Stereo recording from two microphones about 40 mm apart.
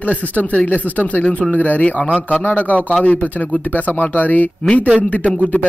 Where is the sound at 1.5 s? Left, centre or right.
Left.